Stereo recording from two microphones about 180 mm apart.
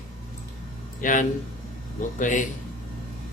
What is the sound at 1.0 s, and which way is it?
Speech, 45° left (ahead or behind).